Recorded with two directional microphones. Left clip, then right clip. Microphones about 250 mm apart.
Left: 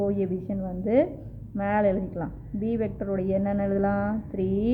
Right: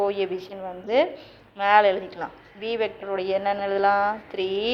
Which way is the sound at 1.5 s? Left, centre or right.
Centre.